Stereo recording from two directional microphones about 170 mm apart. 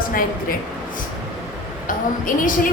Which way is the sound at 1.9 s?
55° left (ahead or behind).